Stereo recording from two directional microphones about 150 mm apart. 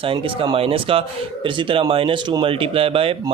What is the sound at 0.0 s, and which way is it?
Speech, 35° right (ahead or behind).